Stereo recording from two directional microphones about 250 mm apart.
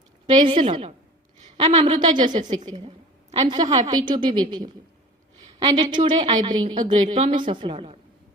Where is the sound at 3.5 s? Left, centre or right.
Centre.